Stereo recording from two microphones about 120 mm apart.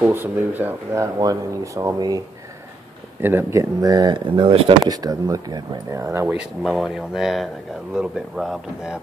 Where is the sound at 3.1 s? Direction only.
20° right (ahead or behind).